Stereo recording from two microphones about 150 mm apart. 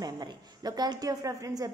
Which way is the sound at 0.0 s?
25° right (ahead or behind).